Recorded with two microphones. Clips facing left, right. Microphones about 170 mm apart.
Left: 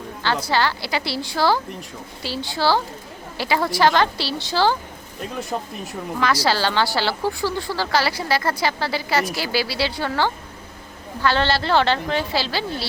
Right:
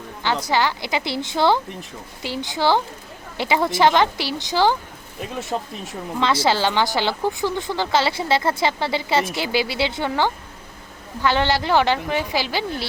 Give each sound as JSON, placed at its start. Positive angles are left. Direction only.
{"t": 0.4, "sound": "a woman's voice", "side_deg": -15}
{"t": 5.2, "sound": "speech", "side_deg": 0}
{"t": 6.1, "sound": "a woman's voice", "side_deg": -25}